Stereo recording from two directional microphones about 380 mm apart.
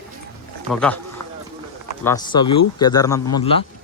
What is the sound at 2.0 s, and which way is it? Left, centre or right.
A man's voice, centre.